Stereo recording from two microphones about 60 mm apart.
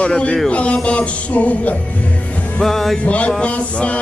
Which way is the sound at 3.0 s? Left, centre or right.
Left.